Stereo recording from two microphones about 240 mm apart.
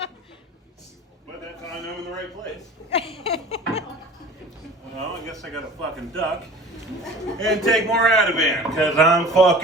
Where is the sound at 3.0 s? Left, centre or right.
Left.